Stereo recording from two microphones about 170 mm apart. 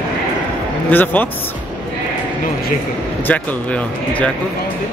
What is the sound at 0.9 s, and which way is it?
Speech, 10° left (ahead or behind).